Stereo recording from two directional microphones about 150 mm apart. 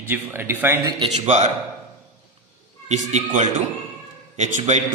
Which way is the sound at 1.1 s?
45° right (ahead or behind).